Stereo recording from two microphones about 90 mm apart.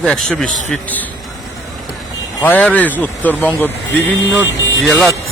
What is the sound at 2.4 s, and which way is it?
Speech, 20° left (ahead or behind).